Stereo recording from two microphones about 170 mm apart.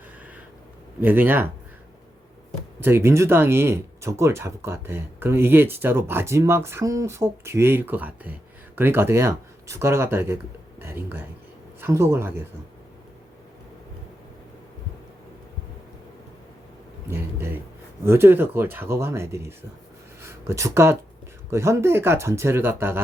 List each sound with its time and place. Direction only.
1.0 s speech: 10° right (ahead or behind)
2.8 s speech: 15° right (ahead or behind)
17.1 s speech: 15° right (ahead or behind)